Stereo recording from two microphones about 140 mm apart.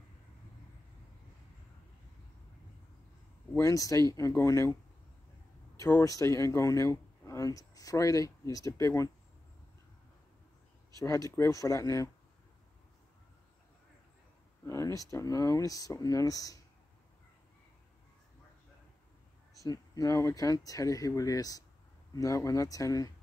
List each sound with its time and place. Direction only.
3.5 s speech: 25° left (ahead or behind)
5.9 s speech: 20° left (ahead or behind)
11.0 s speech: 25° left (ahead or behind)
14.7 s speech: 20° left (ahead or behind)
19.6 s speech: 25° left (ahead or behind)